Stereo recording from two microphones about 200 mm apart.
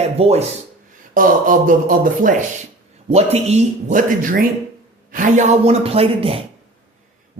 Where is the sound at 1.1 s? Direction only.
40° right (ahead or behind).